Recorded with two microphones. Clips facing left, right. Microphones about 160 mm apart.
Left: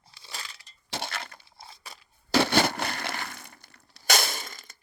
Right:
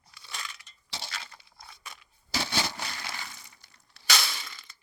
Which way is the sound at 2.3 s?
65° left (ahead or behind).